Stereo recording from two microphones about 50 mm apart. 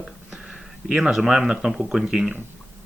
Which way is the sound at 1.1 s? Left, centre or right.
Centre.